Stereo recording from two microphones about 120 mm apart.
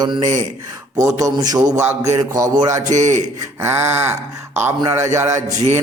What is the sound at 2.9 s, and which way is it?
Speech, 80° right.